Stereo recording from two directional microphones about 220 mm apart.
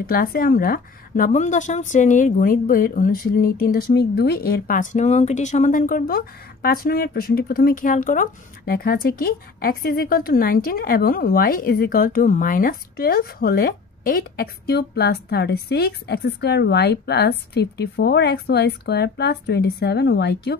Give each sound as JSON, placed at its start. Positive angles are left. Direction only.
{"t": 0.0, "sound": "a woman's voice", "side_deg": 40}